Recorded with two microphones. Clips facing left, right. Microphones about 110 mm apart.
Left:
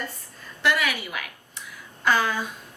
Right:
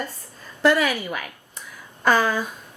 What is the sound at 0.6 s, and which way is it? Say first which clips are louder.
A woman's voice: right 6 dB; 40° right (ahead or behind).